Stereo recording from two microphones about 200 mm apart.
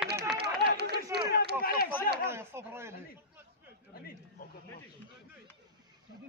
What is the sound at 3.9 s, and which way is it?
Chatter, 50° left (ahead or behind).